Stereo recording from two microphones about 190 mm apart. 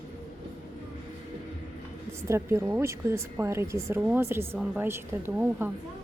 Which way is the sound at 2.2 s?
15° right (ahead or behind).